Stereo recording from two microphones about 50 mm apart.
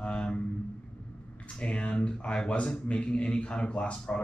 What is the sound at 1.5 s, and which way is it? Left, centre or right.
Speech, left.